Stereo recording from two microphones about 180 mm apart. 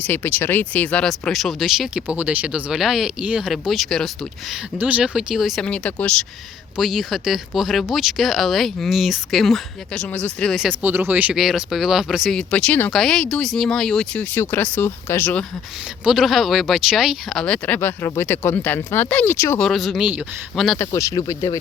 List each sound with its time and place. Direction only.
0.0 s speech: 10° left (ahead or behind)
16.0 s speech: centre (ahead or behind)
19.5 s speech: centre (ahead or behind)
20.7 s speech: 15° left (ahead or behind)